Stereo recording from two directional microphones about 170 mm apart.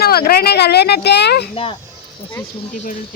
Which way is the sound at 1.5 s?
35° left (ahead or behind).